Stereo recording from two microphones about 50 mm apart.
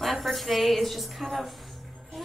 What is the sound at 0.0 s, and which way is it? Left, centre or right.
A woman's voice, centre.